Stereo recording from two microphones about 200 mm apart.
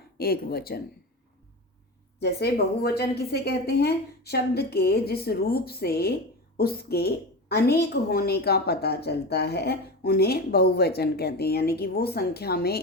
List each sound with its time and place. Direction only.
0.2 s a woman's voice: 50° left (ahead or behind)
2.2 s a woman's voice: 55° left (ahead or behind)